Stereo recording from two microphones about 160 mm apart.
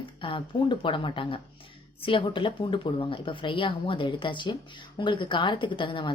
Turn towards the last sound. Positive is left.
turn(degrees=30)  # may be behind; listen again after turning